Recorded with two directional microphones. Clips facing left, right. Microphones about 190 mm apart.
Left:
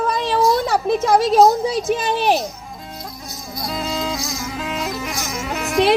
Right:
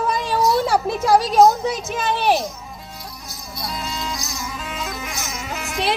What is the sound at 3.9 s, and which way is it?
Music, 90° left.